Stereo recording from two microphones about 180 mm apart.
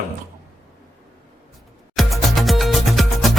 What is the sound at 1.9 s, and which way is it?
Music, centre (ahead or behind).